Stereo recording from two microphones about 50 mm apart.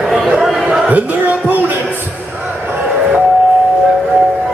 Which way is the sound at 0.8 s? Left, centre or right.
Right.